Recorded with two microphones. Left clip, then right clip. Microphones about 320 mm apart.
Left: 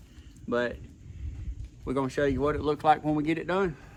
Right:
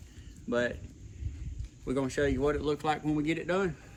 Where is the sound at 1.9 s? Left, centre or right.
Centre.